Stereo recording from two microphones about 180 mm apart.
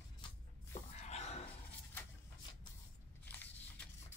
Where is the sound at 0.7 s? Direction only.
40° left (ahead or behind).